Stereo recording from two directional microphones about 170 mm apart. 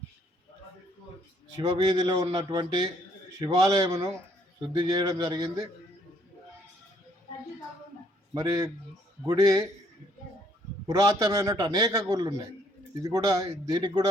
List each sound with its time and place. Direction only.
1.5 s a man's voice: 25° right (ahead or behind)
8.3 s a man's voice: 20° right (ahead or behind)
10.8 s a man's voice: 20° right (ahead or behind)